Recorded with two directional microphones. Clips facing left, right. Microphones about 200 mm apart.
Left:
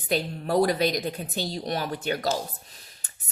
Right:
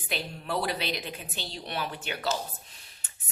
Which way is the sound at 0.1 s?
40° left (ahead or behind).